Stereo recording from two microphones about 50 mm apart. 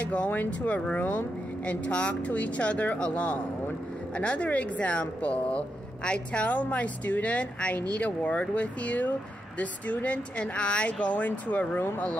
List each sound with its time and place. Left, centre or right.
0.0 s speech: left